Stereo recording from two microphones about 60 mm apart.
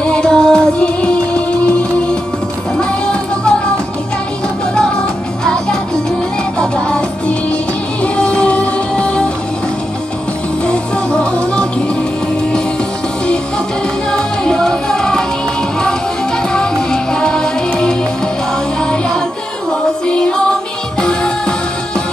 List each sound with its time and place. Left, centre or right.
0.0 s music: centre
5.4 s music: centre
10.7 s music: centre
14.1 s music: centre
16.5 s music: centre